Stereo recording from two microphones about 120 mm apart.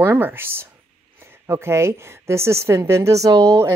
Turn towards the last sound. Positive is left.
turn(degrees=-25)  # may be behind; listen again after turning